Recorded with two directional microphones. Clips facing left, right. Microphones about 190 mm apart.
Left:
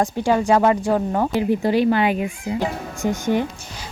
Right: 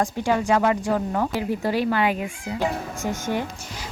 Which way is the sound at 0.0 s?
30° left (ahead or behind).